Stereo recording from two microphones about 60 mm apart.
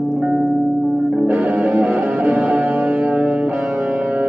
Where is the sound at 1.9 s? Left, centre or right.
Right.